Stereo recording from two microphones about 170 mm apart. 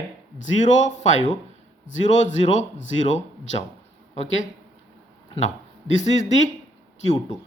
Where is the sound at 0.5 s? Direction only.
45° left (ahead or behind).